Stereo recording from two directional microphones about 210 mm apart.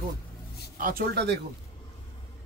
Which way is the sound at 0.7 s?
45° right (ahead or behind).